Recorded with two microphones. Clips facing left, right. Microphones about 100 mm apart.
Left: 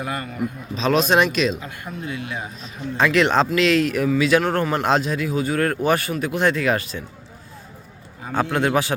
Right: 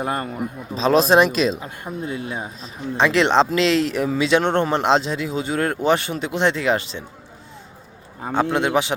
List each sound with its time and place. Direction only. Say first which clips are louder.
0.0 s a man's voice: right 2 dB; 35° right (ahead or behind)
8.3 s a man's voice: right 1 dB; 20° right (ahead or behind)